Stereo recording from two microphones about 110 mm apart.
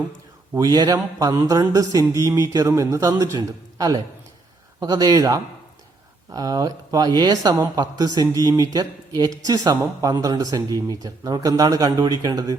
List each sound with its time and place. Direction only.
0.5 s speech: 35° right (ahead or behind)
3.3 s speech: 35° right (ahead or behind)